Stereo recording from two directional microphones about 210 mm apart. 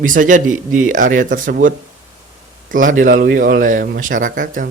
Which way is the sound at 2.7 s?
40° right (ahead or behind).